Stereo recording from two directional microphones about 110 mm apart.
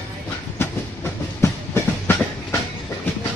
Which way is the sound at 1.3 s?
20° left (ahead or behind).